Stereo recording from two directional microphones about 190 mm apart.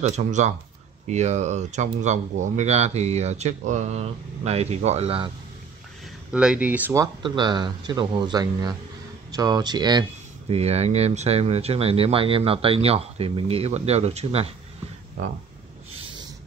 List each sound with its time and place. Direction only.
0.0 s speech: 40° right (ahead or behind)
6.3 s speech: 5° right (ahead or behind)
7.2 s speech: 25° right (ahead or behind)
10.5 s speech: 35° right (ahead or behind)
15.9 s a sound: 25° right (ahead or behind)